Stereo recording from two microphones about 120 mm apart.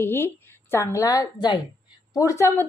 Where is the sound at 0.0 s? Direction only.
20° left (ahead or behind).